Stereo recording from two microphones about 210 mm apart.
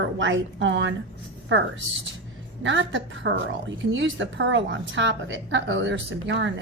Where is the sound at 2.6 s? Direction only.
60° right (ahead or behind).